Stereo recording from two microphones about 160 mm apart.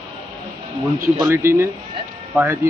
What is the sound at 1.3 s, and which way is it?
Speech, 15° right (ahead or behind).